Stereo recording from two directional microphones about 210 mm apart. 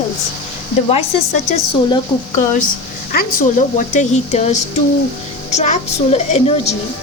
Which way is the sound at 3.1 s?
40° left (ahead or behind).